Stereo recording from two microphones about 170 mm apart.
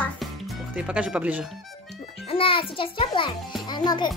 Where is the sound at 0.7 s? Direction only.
5° right (ahead or behind).